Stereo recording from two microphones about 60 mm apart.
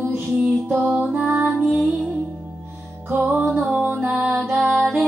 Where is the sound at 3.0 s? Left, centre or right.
Right.